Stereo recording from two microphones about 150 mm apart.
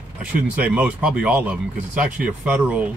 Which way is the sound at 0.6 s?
10° right (ahead or behind).